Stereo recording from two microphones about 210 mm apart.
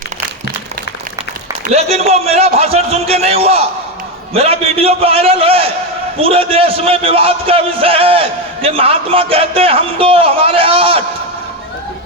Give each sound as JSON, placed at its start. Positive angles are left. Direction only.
{"t": 1.6, "sound": "a man's voice", "side_deg": -30}